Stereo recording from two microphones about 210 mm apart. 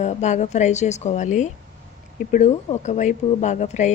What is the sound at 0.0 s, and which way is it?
Speech, 35° left (ahead or behind).